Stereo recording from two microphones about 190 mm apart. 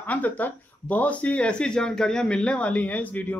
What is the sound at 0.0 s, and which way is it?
Speech, 10° left (ahead or behind).